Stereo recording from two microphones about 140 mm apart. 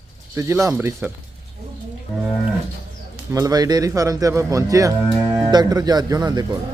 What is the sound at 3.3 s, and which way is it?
Speech, 25° right (ahead or behind).